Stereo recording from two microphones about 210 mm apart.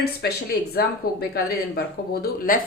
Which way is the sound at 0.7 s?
45° left (ahead or behind).